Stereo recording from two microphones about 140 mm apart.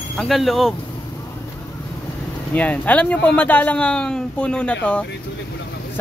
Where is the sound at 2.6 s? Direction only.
10° left (ahead or behind).